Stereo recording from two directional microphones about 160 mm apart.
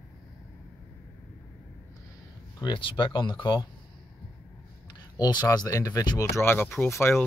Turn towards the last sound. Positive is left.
turn(degrees=15)  # may be behind; listen again after turning